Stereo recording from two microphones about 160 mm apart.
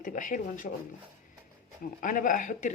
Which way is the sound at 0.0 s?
55° left (ahead or behind).